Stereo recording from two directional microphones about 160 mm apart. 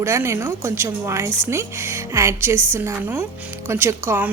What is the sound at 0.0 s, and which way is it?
A woman's voice, 15° right (ahead or behind).